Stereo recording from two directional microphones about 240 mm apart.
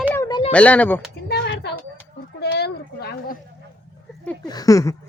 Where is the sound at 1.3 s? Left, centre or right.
Left.